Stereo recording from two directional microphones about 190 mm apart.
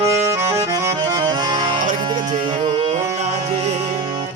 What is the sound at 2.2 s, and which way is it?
Music, 40° right (ahead or behind).